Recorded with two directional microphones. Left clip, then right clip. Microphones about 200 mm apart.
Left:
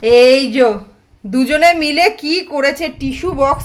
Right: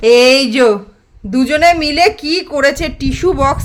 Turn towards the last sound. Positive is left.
turn(degrees=-25)  # may be behind; listen again after turning